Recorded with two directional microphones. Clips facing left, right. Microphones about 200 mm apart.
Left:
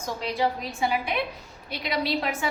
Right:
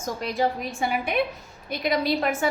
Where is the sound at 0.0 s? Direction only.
50° right (ahead or behind).